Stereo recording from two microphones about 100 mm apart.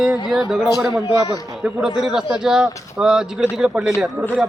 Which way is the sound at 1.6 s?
5° right (ahead or behind).